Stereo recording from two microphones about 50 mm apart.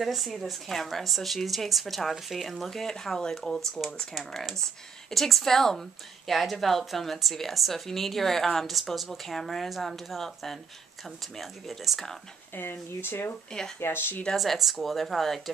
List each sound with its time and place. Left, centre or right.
0.0 s a woman's voice: centre
12.5 s speech: left
13.5 s speech: centre
13.7 s speech: left
14.3 s a woman's voice: centre